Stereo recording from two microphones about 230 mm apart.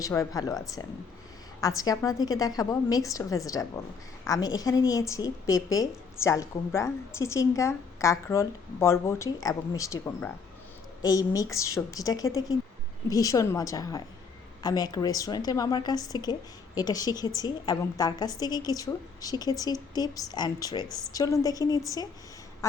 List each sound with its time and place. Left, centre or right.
0.0 s a woman's voice: centre